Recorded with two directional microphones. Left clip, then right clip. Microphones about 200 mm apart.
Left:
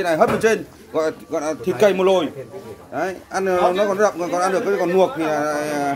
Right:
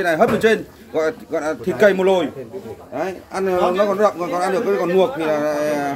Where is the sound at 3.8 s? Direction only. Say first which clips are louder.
Right 1 dB; 10° left (ahead or behind).